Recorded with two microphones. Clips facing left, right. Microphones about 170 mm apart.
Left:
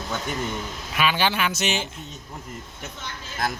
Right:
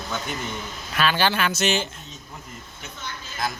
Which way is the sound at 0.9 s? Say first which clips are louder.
Right 1 dB; 15° left (ahead or behind).